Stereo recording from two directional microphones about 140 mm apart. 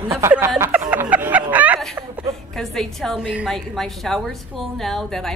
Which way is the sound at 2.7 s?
5° left (ahead or behind).